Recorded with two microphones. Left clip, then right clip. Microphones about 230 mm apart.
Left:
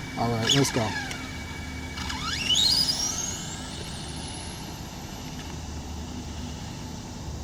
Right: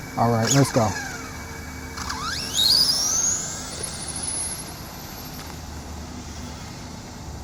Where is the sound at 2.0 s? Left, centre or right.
Left.